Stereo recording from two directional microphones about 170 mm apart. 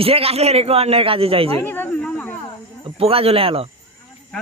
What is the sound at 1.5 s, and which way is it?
Speech, 10° left (ahead or behind).